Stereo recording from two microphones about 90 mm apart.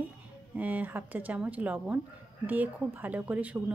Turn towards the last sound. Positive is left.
turn(degrees=-15)  # may be behind; listen again after turning